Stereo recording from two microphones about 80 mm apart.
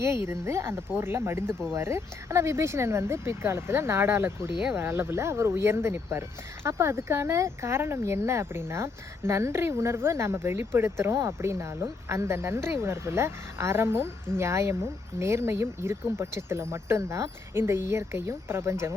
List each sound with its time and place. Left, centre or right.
0.0 s speech: right